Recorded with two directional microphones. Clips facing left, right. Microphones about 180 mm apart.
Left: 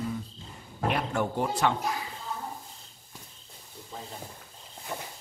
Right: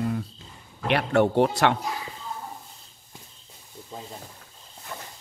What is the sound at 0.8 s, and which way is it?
Speech, 70° right (ahead or behind).